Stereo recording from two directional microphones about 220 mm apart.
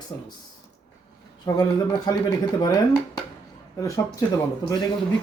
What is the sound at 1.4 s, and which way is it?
Speech, 15° left (ahead or behind).